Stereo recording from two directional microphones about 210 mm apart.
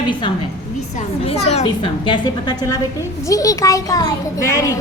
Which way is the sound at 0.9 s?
30° left (ahead or behind).